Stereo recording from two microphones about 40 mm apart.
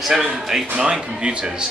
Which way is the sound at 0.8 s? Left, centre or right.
Centre.